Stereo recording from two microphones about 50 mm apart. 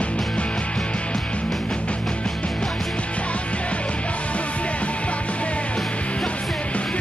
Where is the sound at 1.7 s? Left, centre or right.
Left.